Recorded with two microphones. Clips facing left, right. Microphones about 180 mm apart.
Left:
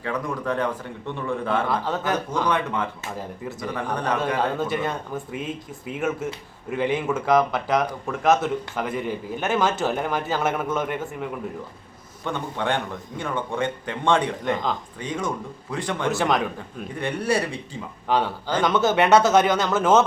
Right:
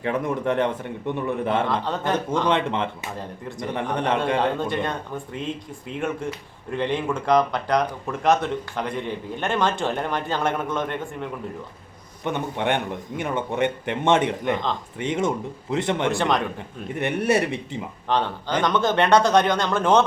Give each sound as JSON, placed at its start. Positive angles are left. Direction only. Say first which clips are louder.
{"t": 0.0, "sound": "speech", "louder": "right 4 dB", "side_deg": -25}
{"t": 4.5, "sound": "speech", "louder": "even", "side_deg": 5}
{"t": 12.2, "sound": "speech", "louder": "right 2 dB", "side_deg": -20}
{"t": 16.1, "sound": "speech", "louder": "even", "side_deg": 5}
{"t": 17.0, "sound": "speech", "louder": "right 3 dB", "side_deg": -20}
{"t": 18.1, "sound": "a man's voice", "louder": "left 1 dB", "side_deg": 5}